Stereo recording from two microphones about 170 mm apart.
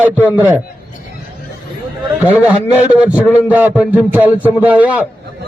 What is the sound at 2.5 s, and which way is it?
A man's voice, 10° right (ahead or behind).